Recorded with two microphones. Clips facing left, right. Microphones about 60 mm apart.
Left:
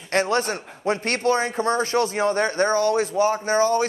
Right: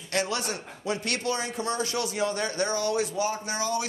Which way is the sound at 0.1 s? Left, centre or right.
Left.